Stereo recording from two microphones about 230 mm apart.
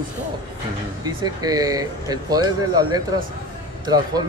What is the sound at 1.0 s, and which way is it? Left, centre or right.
Speech, centre.